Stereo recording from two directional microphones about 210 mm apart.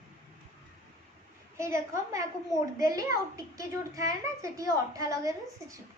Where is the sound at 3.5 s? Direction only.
15° right (ahead or behind).